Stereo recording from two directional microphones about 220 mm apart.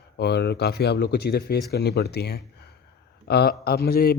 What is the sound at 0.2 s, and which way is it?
A man's voice, 50° left (ahead or behind).